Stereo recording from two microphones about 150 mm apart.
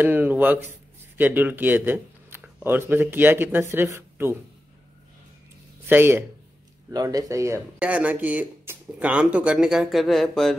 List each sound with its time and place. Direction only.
0.0 s speech: 10° right (ahead or behind)
5.9 s speech: 15° right (ahead or behind)
6.9 s speech: 25° right (ahead or behind)
7.8 s speech: 10° right (ahead or behind)